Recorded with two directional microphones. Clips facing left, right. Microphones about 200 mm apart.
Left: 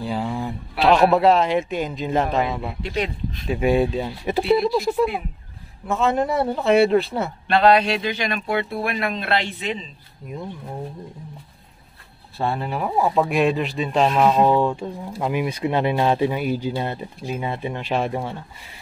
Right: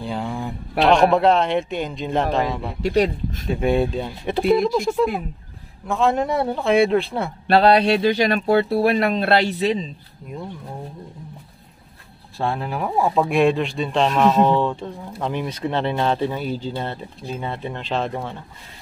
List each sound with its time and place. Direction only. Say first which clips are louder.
0.0 s a man's voice: left 1 dB; 5° left (ahead or behind)
2.8 s speech: right 10 dB; 45° right (ahead or behind)
3.4 s speech: left 1 dB; 5° left (ahead or behind)
7.4 s speech: right 2 dB; 35° right (ahead or behind)
12.4 s speech: even; centre (ahead or behind)